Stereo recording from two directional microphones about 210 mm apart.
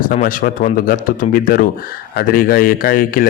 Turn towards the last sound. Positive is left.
turn(degrees=45)  # may be behind; listen again after turning